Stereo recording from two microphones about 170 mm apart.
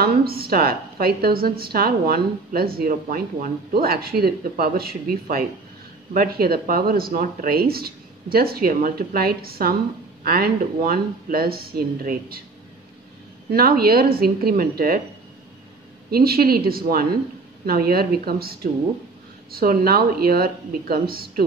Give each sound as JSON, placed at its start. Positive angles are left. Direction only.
{"t": 0.0, "sound": "a woman's voice", "side_deg": -65}
{"t": 13.5, "sound": "a woman's voice", "side_deg": -60}
{"t": 16.1, "sound": "a woman's voice", "side_deg": -65}